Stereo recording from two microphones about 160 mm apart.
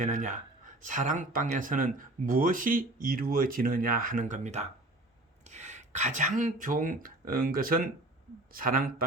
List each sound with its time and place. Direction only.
0.0 s speech: 50° right (ahead or behind)